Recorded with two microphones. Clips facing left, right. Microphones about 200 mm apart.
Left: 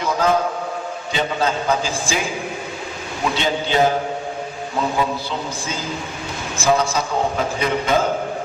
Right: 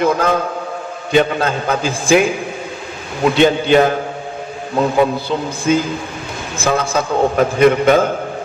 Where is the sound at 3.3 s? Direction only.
55° right (ahead or behind).